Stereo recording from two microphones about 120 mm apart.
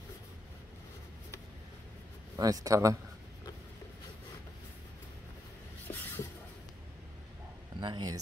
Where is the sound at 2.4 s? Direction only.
30° right (ahead or behind).